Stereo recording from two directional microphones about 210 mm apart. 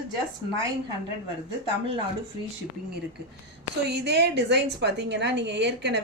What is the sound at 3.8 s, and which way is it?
A woman's voice, 50° right (ahead or behind).